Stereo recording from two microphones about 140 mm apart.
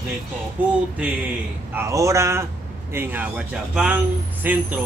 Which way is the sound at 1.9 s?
20° right (ahead or behind).